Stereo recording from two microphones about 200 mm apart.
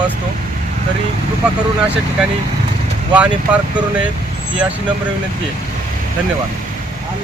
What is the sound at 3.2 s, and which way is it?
Speech, 5° right (ahead or behind).